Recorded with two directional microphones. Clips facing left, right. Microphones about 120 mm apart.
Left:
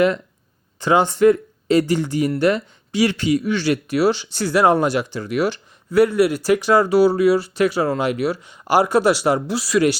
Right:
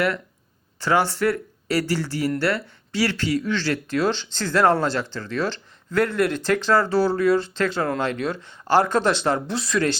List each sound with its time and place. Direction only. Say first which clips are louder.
0.8 s speech: left 5 dB; 15° left (ahead or behind)